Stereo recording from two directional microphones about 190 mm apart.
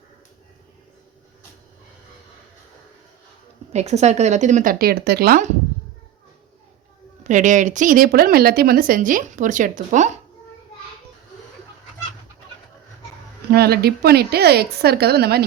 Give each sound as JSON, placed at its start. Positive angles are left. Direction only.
{"t": 3.7, "sound": "speech", "side_deg": -35}
{"t": 7.3, "sound": "a woman's voice", "side_deg": -40}
{"t": 13.5, "sound": "speech", "side_deg": -55}